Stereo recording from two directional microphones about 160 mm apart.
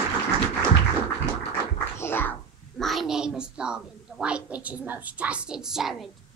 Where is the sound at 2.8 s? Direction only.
Centre (ahead or behind).